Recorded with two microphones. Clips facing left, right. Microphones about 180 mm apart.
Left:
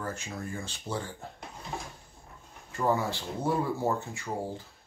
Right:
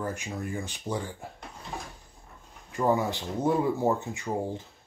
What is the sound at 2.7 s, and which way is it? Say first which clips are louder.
Speech: right 3 dB; 15° right (ahead or behind).